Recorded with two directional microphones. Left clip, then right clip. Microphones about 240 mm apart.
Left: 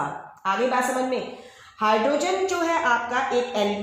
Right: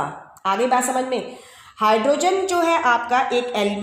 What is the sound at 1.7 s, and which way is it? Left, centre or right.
A woman's voice, right.